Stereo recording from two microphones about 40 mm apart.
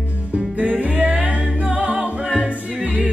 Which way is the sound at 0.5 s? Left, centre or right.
Right.